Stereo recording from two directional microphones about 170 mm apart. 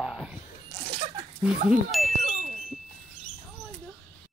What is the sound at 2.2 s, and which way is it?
Wind chime, 45° right (ahead or behind).